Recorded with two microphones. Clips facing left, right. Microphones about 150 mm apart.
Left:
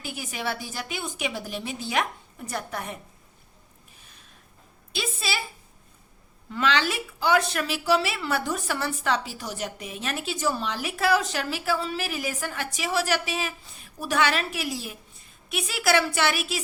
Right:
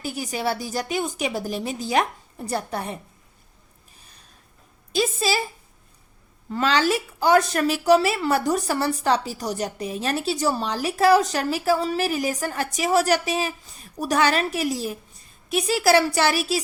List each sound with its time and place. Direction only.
0.0 s a woman's voice: 40° right (ahead or behind)
4.0 s a sound: 40° right (ahead or behind)
4.9 s a woman's voice: 40° right (ahead or behind)
6.5 s a woman's voice: 40° right (ahead or behind)